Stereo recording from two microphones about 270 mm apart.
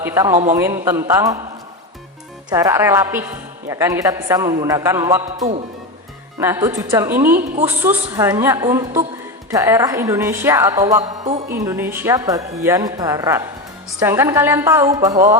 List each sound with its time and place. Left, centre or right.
0.0 s speech: centre
2.5 s speech: centre
11.2 s music: right
11.5 s speech: centre